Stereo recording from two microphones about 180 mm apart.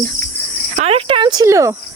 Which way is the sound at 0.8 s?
30° right (ahead or behind).